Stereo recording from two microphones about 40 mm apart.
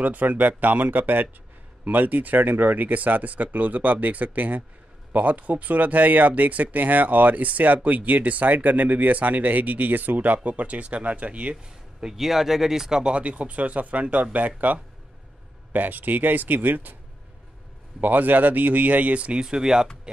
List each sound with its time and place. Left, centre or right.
0.0 s speech: right
12.0 s speech: centre
13.1 s speech: right
18.0 s speech: right
19.4 s speech: centre